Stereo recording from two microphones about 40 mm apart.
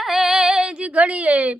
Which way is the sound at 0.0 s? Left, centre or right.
Centre.